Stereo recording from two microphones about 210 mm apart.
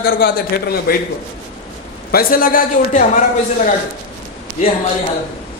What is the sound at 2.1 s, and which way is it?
A man's voice, 40° left (ahead or behind).